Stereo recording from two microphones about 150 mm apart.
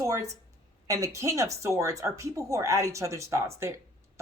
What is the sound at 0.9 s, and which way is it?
Speech, 20° right (ahead or behind).